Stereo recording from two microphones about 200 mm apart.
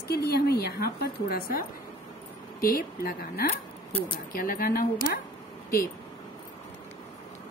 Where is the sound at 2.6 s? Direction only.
45° left (ahead or behind).